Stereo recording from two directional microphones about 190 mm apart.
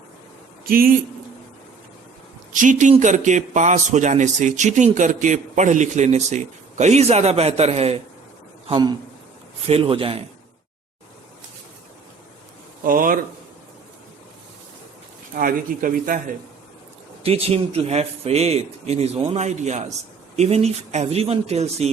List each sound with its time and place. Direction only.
0.6 s a man's voice: 50° right (ahead or behind)
2.5 s a man's voice: 40° right (ahead or behind)
12.8 s speech: 45° right (ahead or behind)
15.4 s speech: 45° right (ahead or behind)
17.2 s a man's voice: 30° right (ahead or behind)